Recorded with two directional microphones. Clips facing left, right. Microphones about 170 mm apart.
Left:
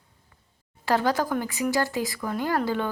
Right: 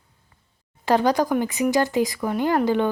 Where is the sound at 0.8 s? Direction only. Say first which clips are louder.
Right 4 dB; 20° right (ahead or behind).